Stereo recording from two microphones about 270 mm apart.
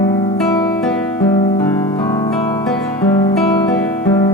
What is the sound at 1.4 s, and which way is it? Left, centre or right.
Music, centre.